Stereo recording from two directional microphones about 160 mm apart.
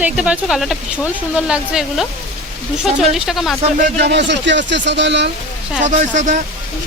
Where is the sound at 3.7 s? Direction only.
75° right (ahead or behind); by 5.3 s 90° right.